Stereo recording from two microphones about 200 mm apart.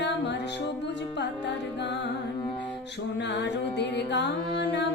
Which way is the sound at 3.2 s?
60° left (ahead or behind).